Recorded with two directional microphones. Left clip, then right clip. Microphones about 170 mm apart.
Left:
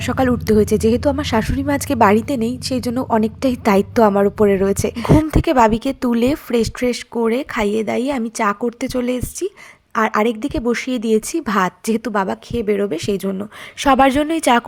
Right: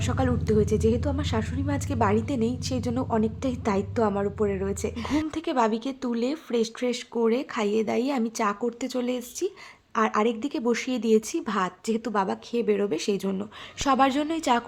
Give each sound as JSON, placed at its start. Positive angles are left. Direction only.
{"t": 0.0, "sound": "speech", "side_deg": 35}
{"t": 5.3, "sound": "a woman's voice", "side_deg": 45}